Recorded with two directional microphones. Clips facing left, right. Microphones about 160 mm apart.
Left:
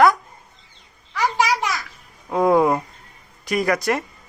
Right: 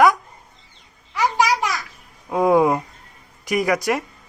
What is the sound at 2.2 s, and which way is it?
Speech, 5° right (ahead or behind).